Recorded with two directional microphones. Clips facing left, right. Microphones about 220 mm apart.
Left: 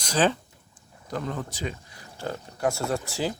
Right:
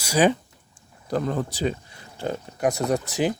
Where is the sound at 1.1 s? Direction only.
35° right (ahead or behind); by 3.3 s 20° right (ahead or behind).